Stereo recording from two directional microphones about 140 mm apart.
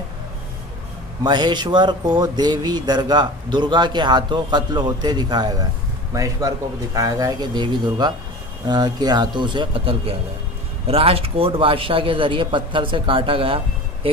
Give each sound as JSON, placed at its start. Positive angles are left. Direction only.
{"t": 1.2, "sound": "speech", "side_deg": -30}